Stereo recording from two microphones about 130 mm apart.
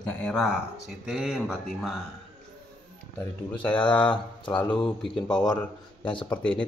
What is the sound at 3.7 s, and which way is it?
Speech, 40° left (ahead or behind).